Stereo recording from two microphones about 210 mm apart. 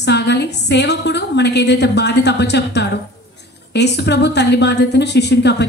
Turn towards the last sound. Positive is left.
turn(degrees=55)  # may be behind; listen again after turning